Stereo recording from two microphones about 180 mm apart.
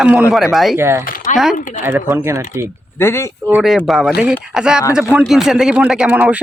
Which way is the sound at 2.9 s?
15° left (ahead or behind).